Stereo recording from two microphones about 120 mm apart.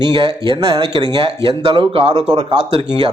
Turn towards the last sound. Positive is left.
turn(degrees=-45)  # may be behind; listen again after turning